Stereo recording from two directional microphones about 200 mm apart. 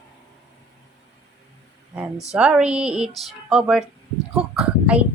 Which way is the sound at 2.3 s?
5° right (ahead or behind).